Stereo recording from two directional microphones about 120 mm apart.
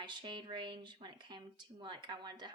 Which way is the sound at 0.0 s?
40° right (ahead or behind).